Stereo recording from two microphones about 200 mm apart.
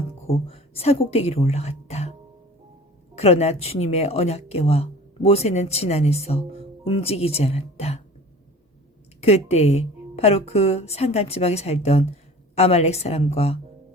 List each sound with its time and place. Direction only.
0.3 s a woman's voice: 30° left (ahead or behind)
3.2 s speech: 30° left (ahead or behind)
9.2 s speech: 30° left (ahead or behind)